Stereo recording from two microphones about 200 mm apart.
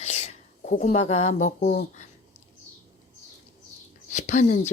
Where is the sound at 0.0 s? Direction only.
35° left (ahead or behind).